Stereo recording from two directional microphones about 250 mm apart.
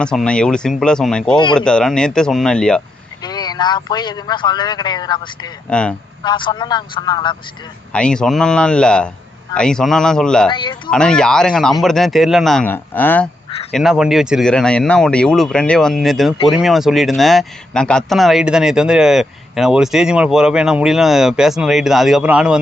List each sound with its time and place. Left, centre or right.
0.0 s a man's voice: centre
3.2 s a man's voice: centre
5.6 s a man's voice: centre
6.2 s a man's voice: centre
7.9 s a man's voice: centre
10.5 s a man's voice: centre
10.9 s a man's voice: centre